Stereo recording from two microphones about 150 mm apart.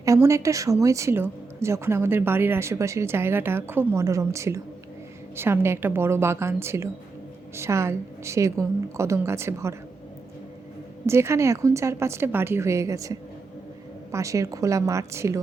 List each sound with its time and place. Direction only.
0.0 s a woman's voice: 20° right (ahead or behind)
11.0 s a woman's voice: 20° right (ahead or behind)